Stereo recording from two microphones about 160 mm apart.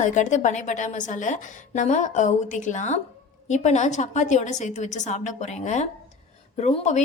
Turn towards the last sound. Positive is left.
turn(degrees=45)  # may be behind; listen again after turning